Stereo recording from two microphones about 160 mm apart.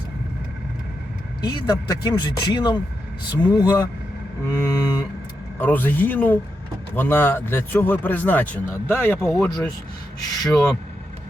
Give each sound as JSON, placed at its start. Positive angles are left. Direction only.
{"t": 1.5, "sound": "speech", "side_deg": 25}
{"t": 5.5, "sound": "speech", "side_deg": 10}
{"t": 9.5, "sound": "speech", "side_deg": 25}